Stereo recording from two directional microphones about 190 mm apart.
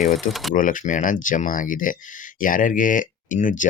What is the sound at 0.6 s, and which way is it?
Speech, 45° left (ahead or behind).